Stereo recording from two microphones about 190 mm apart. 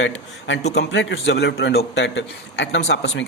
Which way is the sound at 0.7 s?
65° left (ahead or behind).